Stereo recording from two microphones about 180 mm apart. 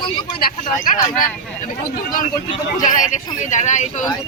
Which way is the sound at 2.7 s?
45° left (ahead or behind).